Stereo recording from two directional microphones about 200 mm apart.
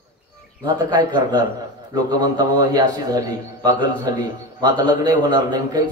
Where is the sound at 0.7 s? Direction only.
20° right (ahead or behind).